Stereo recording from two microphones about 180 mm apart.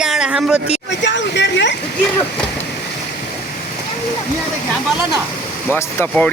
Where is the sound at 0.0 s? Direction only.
5° right (ahead or behind).